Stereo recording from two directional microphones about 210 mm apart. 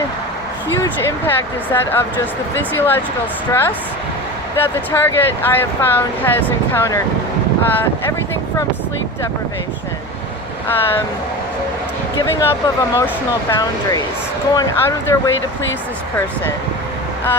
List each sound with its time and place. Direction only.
1.3 s speech: 10° left (ahead or behind)
10.7 s speech: 10° left (ahead or behind)
12.2 s speech: 10° left (ahead or behind)